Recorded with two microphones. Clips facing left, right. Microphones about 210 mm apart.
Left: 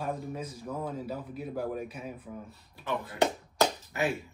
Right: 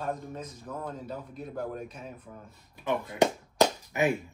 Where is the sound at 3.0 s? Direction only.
15° right (ahead or behind).